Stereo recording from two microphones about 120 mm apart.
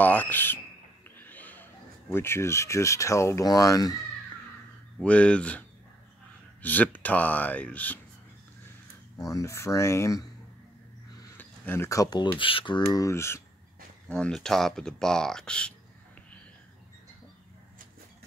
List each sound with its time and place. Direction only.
0.0 s speech: 15° left (ahead or behind)
1.1 s a sound: 15° left (ahead or behind)
2.0 s speech: 20° left (ahead or behind)
4.9 s speech: 10° left (ahead or behind)
9.2 s speech: 25° left (ahead or behind)
11.3 s speech: 15° left (ahead or behind)
12.4 s speech: 45° left (ahead or behind)
13.0 s speech: 20° left (ahead or behind)
14.0 s speech: 5° left (ahead or behind)